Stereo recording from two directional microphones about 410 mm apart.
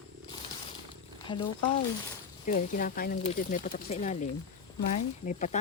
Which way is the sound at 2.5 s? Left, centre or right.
Centre.